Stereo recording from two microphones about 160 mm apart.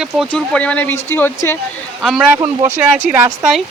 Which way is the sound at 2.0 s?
Centre (ahead or behind).